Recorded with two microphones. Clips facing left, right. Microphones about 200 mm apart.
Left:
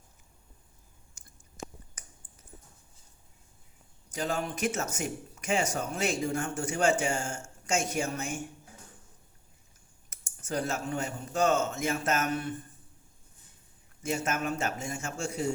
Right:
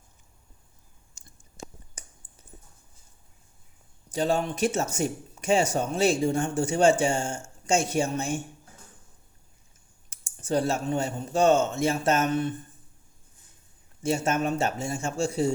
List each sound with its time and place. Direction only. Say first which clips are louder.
1.1 s clicking: right 4 dB; 30° right (ahead or behind)
4.1 s speech: right 7 dB; 30° right (ahead or behind)
10.1 s speech: right 8 dB; 30° right (ahead or behind)
14.0 s speech: right 6 dB; 30° right (ahead or behind)